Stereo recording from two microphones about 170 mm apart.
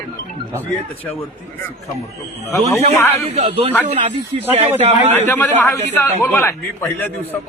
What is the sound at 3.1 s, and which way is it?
Speech, 35° right (ahead or behind).